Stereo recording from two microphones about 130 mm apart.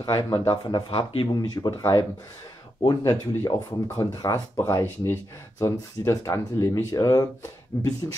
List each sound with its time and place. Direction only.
0.0 s speech: 25° left (ahead or behind)
0.5 s speech: 40° left (ahead or behind)